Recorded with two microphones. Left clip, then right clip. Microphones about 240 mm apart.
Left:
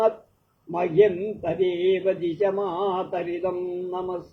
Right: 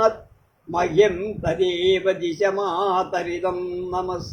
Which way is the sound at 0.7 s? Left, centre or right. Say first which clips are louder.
Right 2 dB; right.